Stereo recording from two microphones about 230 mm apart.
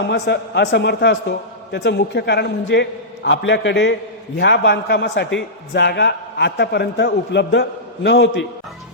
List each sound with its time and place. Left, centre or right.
0.1 s a man's voice: left